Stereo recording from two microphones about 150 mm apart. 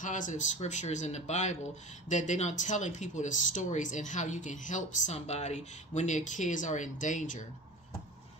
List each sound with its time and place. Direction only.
0.0 s speech: 55° left (ahead or behind)